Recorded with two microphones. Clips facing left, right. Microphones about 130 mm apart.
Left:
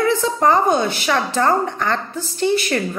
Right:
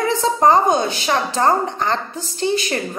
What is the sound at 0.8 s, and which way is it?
A woman's voice, 30° right (ahead or behind).